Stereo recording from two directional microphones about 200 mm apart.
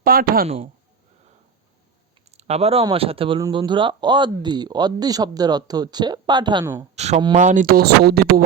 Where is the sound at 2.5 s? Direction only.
30° right (ahead or behind).